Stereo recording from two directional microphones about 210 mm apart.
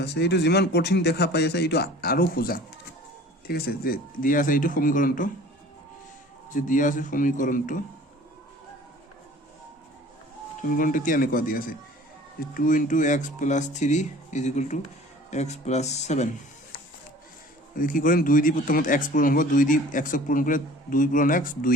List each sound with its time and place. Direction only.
0.0 s speech: 50° left (ahead or behind)
6.5 s speech: 40° left (ahead or behind)
10.8 s speech: 40° left (ahead or behind)
17.7 s speech: 40° left (ahead or behind)